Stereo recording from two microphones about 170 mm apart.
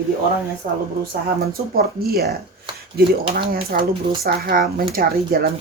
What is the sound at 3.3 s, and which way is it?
Speech, 60° right (ahead or behind).